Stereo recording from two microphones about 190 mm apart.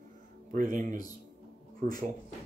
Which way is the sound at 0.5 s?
45° right (ahead or behind).